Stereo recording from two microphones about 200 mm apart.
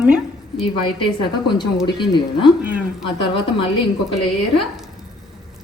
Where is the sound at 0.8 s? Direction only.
25° left (ahead or behind).